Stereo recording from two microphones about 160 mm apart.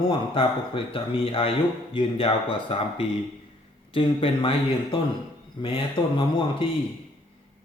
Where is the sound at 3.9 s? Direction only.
35° left (ahead or behind).